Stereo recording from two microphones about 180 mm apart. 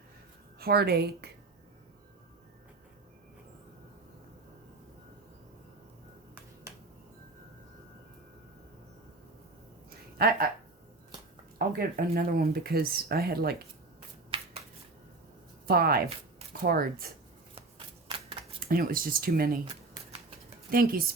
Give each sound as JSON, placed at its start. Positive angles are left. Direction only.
{"t": 0.6, "sound": "speech", "side_deg": -60}
{"t": 10.2, "sound": "speech", "side_deg": -55}
{"t": 11.5, "sound": "speech", "side_deg": -55}
{"t": 14.3, "sound": "shuffling cards", "side_deg": -25}
{"t": 15.6, "sound": "speech", "side_deg": -55}
{"t": 17.5, "sound": "shuffling cards", "side_deg": -30}
{"t": 18.6, "sound": "speech", "side_deg": -55}
{"t": 20.7, "sound": "speech", "side_deg": -55}